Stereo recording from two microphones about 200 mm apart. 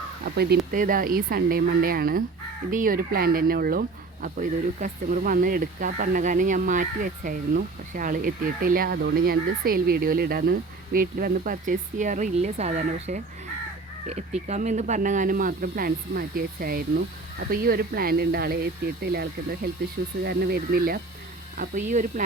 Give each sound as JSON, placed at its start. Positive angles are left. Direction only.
{"t": 0.3, "sound": "speech", "side_deg": -50}